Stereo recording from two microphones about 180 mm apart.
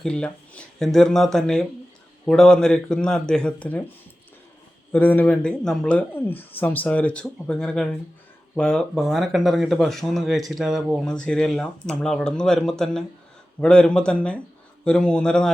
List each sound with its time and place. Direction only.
0.0 s speech: 5° left (ahead or behind)
4.9 s speech: 10° left (ahead or behind)